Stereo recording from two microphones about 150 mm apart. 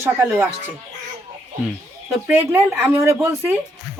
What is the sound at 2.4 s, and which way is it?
Speech, 15° right (ahead or behind).